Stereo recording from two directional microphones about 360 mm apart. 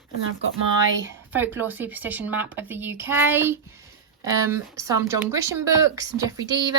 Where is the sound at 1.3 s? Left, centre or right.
Centre.